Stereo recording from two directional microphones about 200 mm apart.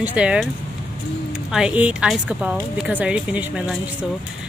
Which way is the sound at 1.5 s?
5° right (ahead or behind).